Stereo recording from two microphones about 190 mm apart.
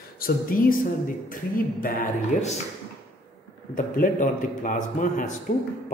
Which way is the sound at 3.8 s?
45° left (ahead or behind).